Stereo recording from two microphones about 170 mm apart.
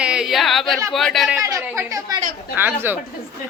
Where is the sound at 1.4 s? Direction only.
20° right (ahead or behind).